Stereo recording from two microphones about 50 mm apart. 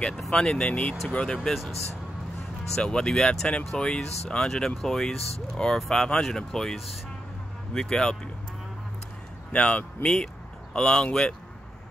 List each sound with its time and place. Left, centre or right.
0.3 s speech: centre
2.7 s speech: centre
9.5 s speech: left
10.0 s speech: centre